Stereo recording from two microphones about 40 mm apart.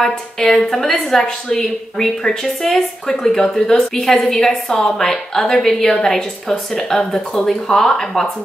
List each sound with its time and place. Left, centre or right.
0.4 s a woman's voice: centre
7.0 s speech: left
7.4 s a woman's voice: centre